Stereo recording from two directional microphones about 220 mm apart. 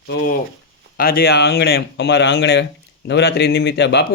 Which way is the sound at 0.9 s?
40° left (ahead or behind).